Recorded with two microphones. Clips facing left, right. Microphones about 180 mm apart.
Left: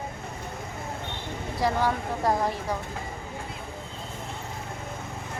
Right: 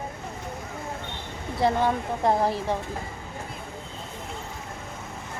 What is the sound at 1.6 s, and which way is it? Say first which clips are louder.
Speech: right 3 dB; 25° right (ahead or behind).